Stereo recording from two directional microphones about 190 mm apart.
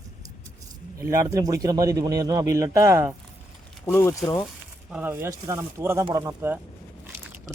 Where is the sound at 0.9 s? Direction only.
15° right (ahead or behind).